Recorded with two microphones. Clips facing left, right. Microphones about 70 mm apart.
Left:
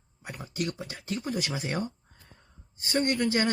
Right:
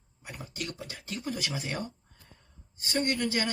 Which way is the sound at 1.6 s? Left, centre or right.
Left.